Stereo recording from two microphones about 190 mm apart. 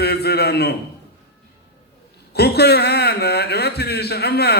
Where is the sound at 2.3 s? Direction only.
60° left (ahead or behind).